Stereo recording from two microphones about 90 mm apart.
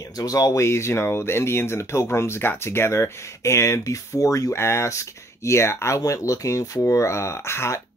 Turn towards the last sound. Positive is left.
turn(degrees=30)  # may be behind; listen again after turning